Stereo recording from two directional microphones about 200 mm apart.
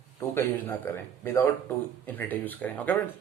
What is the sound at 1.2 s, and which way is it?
A man's voice, 10° left (ahead or behind).